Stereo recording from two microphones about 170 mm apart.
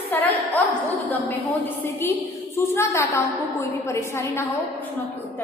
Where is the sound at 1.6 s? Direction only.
15° left (ahead or behind).